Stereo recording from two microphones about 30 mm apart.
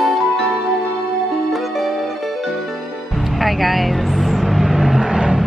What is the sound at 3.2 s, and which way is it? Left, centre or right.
Vehicle, centre.